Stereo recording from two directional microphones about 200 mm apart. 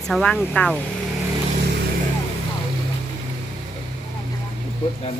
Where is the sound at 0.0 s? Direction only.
Centre (ahead or behind).